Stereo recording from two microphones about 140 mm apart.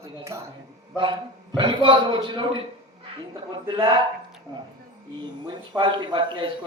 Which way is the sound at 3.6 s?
35° right (ahead or behind).